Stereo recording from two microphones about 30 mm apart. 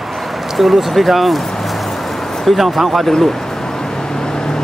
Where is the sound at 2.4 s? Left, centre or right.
Centre.